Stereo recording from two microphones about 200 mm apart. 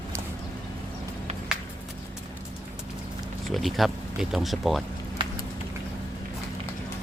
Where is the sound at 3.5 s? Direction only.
Centre (ahead or behind).